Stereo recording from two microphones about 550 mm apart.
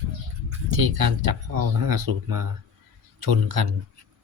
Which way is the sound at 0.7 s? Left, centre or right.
Right.